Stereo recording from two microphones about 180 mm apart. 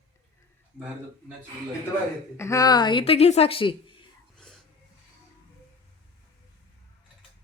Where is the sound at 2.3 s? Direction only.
15° left (ahead or behind).